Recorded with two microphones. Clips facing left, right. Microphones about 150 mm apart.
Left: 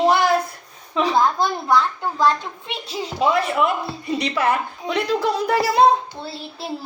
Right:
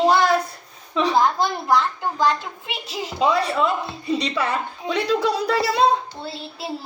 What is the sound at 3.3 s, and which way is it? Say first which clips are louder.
Speech: left 1 dB; 30° right (ahead or behind).